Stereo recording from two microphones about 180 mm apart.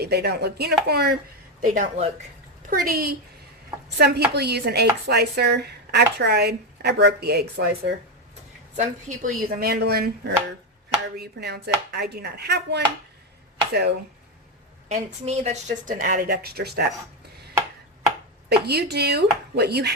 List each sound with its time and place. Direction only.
0.0 s speech: 65° right (ahead or behind)
1.6 s a woman's voice: 45° right (ahead or behind)
2.6 s speech: 55° right (ahead or behind)
8.7 s speech: 45° right (ahead or behind); by 12.8 s 65° right (ahead or behind)
14.8 s a woman's voice: 40° right (ahead or behind); by 16.8 s 60° right (ahead or behind)
18.4 s speech: 65° right (ahead or behind)